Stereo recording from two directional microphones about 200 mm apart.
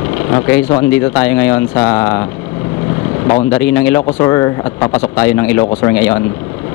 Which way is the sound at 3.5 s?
10° left (ahead or behind).